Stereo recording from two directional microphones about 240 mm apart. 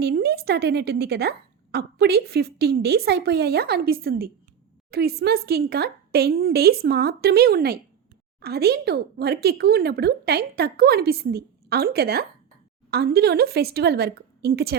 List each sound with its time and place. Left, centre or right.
0.0 s a woman's voice: right